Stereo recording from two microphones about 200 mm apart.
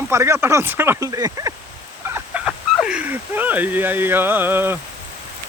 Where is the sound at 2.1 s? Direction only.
5° right (ahead or behind).